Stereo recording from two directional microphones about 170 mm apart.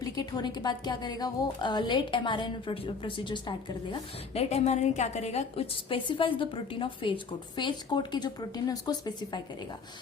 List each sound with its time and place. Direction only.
0.0 s a woman's voice: 25° left (ahead or behind)